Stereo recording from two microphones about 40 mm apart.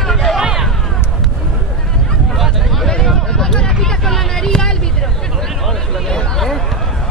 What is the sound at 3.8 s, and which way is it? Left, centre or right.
Vehicle, centre.